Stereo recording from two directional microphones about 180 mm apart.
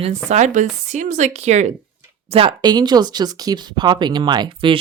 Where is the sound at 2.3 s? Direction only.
25° right (ahead or behind).